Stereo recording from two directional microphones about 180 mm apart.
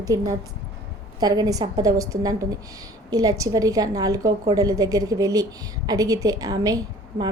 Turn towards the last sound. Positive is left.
turn(degrees=-20)  # may be behind; listen again after turning